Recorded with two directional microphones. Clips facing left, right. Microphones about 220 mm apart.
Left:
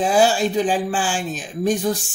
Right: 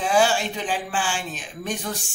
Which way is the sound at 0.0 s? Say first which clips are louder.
Left 4 dB; 40° left (ahead or behind).